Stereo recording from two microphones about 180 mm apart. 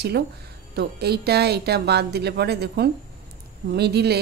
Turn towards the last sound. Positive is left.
turn(degrees=-65)  # may be behind; listen again after turning